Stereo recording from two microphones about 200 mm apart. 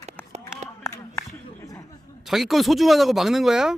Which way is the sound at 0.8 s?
15° left (ahead or behind).